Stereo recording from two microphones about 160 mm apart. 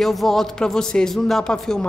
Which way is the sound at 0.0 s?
Centre (ahead or behind).